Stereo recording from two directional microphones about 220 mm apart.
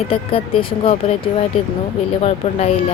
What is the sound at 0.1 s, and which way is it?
Speech, 25° left (ahead or behind).